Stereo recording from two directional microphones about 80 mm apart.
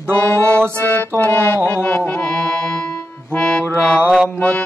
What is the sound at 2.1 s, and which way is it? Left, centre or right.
Music, centre.